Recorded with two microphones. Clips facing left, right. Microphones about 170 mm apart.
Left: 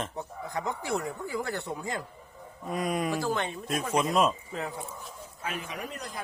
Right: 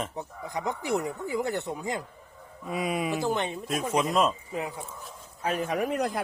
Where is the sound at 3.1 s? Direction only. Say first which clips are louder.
Right 2 dB; 20° right (ahead or behind).